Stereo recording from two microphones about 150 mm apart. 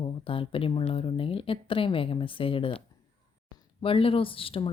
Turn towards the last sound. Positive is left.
turn(degrees=35)  # may be behind; listen again after turning